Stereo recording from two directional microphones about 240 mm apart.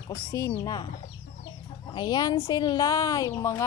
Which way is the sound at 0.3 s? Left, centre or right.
Centre.